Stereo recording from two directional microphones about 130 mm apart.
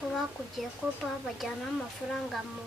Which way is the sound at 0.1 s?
Centre (ahead or behind).